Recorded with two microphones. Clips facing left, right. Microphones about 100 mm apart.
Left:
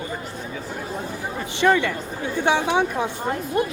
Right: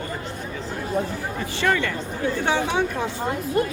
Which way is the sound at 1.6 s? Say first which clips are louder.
Left 4 dB; 15° left (ahead or behind).